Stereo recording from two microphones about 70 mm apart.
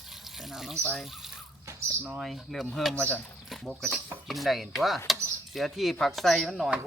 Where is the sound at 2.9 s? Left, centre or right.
Centre.